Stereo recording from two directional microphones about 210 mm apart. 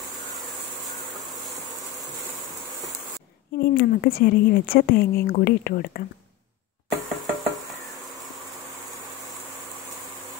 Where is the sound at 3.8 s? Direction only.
45° left (ahead or behind).